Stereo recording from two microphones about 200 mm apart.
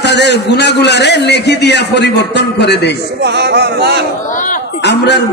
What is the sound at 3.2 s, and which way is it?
Speech, 55° right (ahead or behind).